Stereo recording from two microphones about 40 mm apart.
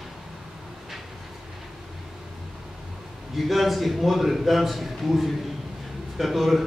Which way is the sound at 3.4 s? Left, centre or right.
Centre.